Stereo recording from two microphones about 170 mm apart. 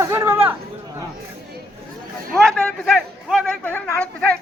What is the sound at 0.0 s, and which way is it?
Chatter, 15° right (ahead or behind).